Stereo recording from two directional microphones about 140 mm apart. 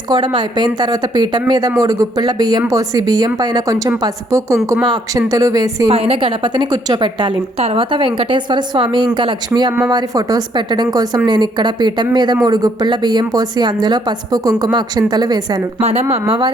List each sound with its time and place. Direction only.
0.1 s a woman's voice: 30° right (ahead or behind)
5.9 s a woman's voice: 40° right (ahead or behind)
15.8 s speech: 50° right (ahead or behind)